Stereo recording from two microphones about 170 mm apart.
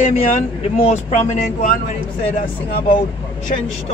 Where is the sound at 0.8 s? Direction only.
40° left (ahead or behind); by 3.0 s 55° left (ahead or behind).